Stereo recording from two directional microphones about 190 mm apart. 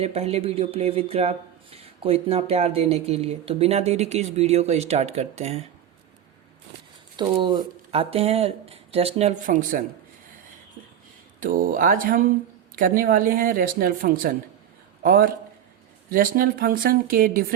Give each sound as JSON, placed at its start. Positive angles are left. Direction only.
{"t": 0.0, "sound": "speech", "side_deg": -35}
{"t": 7.2, "sound": "speech", "side_deg": -25}
{"t": 11.3, "sound": "speech", "side_deg": -45}